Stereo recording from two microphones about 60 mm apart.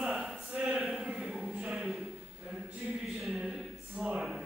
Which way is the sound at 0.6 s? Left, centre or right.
Centre.